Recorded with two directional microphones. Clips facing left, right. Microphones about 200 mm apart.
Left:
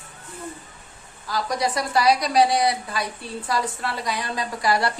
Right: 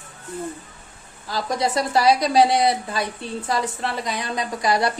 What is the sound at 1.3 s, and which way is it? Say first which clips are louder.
A woman's voice: right 2 dB; 25° right (ahead or behind).